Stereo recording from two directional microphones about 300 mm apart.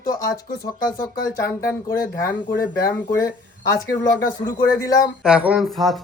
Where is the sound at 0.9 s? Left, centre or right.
Centre.